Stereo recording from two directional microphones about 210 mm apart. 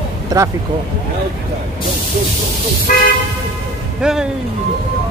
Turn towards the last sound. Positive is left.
turn(degrees=-5)  # may be behind; listen again after turning